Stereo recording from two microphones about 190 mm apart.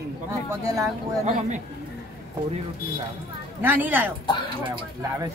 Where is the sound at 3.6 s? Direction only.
10° right (ahead or behind).